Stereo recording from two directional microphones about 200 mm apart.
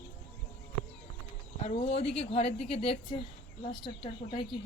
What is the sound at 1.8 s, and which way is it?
Speech, 35° left (ahead or behind).